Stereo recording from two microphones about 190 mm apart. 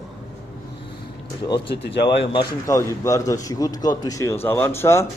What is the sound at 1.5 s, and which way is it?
A man's voice, 20° left (ahead or behind).